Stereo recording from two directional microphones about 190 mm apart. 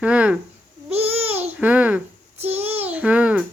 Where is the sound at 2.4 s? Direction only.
10° right (ahead or behind).